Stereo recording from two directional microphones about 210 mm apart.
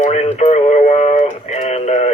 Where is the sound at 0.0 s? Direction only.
35° left (ahead or behind).